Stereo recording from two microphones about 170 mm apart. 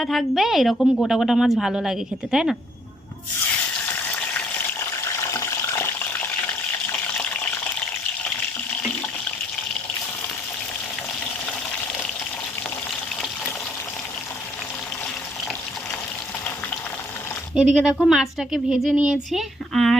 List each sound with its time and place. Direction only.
0.0 s a woman's voice: centre (ahead or behind)
5.3 s water: 15° left (ahead or behind)
17.5 s a woman's voice: 5° right (ahead or behind)